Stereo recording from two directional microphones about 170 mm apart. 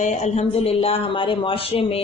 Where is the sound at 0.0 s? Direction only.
40° left (ahead or behind).